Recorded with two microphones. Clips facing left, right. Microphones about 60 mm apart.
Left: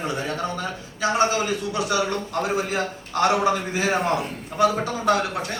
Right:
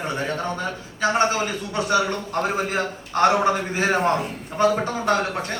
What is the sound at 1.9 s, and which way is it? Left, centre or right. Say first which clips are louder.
A man's voice: right 5 dB; right.